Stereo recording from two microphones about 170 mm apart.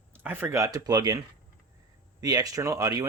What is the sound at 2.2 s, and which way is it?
Speech, 20° right (ahead or behind).